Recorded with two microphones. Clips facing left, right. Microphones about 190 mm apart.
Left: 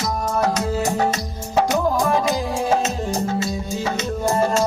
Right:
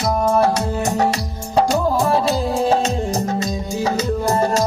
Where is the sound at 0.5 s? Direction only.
35° right (ahead or behind).